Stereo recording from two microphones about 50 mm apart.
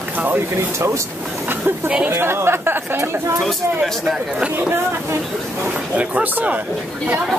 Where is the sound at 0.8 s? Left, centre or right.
Right.